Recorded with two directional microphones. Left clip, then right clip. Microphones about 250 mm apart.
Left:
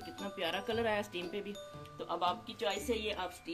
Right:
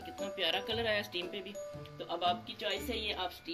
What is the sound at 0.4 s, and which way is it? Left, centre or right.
A woman's voice, left.